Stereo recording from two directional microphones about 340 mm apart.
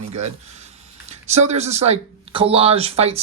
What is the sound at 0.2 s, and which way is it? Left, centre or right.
Speech, centre.